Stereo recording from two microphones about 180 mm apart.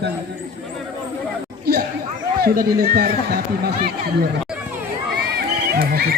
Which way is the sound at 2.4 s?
55° right (ahead or behind).